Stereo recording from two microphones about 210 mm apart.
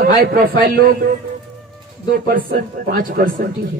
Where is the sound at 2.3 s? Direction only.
45° right (ahead or behind).